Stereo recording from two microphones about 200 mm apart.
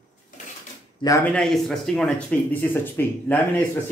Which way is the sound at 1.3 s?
Centre (ahead or behind).